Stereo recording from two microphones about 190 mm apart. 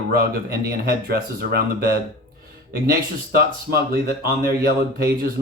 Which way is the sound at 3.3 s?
55° right (ahead or behind).